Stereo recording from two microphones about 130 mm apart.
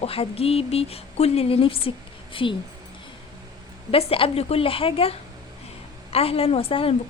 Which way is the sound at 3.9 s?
45° left (ahead or behind).